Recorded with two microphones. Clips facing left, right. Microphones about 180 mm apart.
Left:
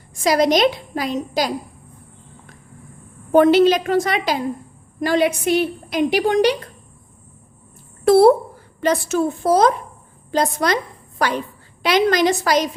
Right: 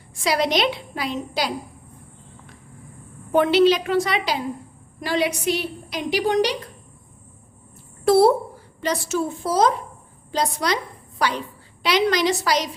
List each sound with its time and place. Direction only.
0.1 s a woman's voice: 45° left (ahead or behind)
3.3 s a woman's voice: 45° left (ahead or behind)
8.0 s a child's voice: 55° left (ahead or behind)